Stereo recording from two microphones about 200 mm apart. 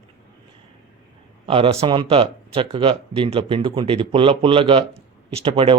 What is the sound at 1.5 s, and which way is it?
Speech, 25° right (ahead or behind).